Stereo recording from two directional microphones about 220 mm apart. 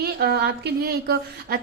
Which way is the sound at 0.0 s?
45° right (ahead or behind).